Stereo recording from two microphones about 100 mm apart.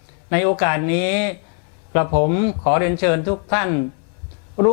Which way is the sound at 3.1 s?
15° left (ahead or behind).